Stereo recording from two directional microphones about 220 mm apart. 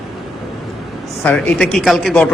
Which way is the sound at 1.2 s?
5° left (ahead or behind).